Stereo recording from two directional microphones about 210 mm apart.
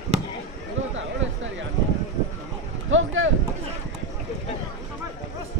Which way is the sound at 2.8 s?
70° right (ahead or behind).